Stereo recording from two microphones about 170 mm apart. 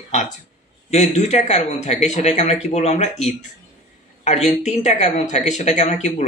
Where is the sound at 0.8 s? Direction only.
40° left (ahead or behind).